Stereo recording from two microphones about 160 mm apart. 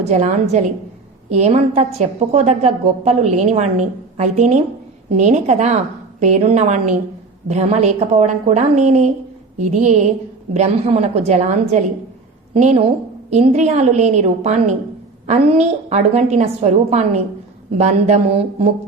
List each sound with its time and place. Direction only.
0.0 s a woman's voice: 45° right (ahead or behind)